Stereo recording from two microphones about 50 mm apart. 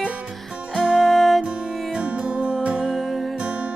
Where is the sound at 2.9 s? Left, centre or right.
Centre.